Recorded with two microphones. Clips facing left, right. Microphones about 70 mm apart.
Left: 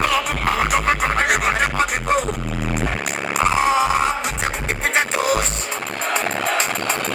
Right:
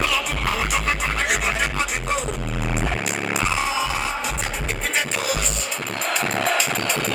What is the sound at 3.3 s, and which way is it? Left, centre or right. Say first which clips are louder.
Music: left 8 dB; left.